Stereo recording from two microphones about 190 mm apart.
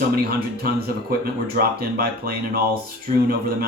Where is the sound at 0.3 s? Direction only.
55° right (ahead or behind).